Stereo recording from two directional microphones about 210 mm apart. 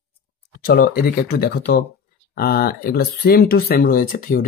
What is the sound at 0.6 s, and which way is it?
Speech, 45° left (ahead or behind).